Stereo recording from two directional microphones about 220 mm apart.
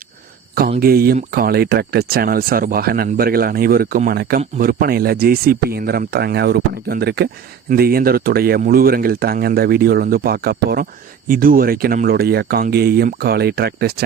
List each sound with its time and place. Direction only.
0.8 s speech: 45° right (ahead or behind)